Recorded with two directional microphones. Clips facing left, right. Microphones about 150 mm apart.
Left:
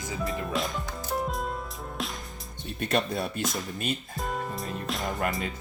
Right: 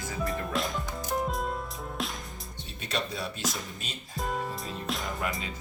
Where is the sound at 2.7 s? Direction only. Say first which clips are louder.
Left 6 dB; 55° left (ahead or behind).